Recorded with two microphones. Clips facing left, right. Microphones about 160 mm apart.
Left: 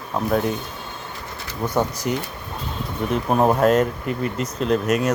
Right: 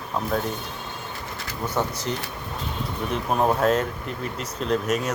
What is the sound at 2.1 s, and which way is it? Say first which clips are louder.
Speech: left 5 dB; 10° left (ahead or behind).